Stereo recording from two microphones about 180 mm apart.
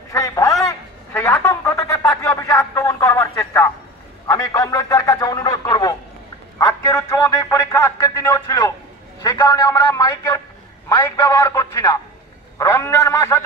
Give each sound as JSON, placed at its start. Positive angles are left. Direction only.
{"t": 0.1, "sound": "a man's voice", "side_deg": 15}
{"t": 0.7, "sound": "a sound", "side_deg": 15}
{"t": 4.3, "sound": "a man's voice", "side_deg": 15}